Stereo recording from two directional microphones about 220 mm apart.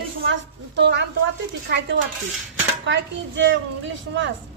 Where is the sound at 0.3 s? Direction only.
55° right (ahead or behind).